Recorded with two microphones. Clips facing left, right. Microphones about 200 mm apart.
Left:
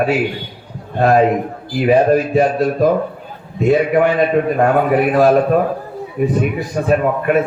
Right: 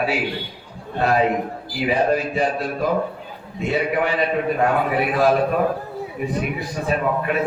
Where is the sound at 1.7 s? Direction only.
45° left (ahead or behind).